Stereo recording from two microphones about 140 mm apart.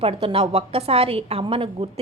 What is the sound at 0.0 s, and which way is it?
A woman's voice, 40° right (ahead or behind).